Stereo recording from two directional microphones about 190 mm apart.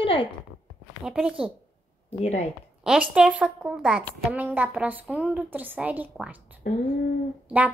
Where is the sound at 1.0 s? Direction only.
5° right (ahead or behind).